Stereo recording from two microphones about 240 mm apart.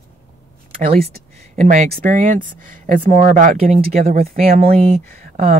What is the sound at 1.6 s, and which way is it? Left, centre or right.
Speech, right.